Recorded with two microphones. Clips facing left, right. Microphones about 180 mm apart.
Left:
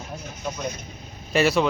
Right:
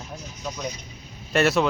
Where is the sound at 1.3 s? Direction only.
Centre (ahead or behind).